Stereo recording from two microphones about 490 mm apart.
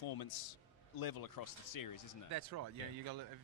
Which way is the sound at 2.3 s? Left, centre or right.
Right.